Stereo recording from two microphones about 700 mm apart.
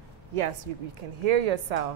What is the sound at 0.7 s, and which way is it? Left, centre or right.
Speech, right.